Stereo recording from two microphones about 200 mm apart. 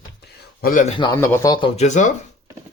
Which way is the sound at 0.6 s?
40° left (ahead or behind).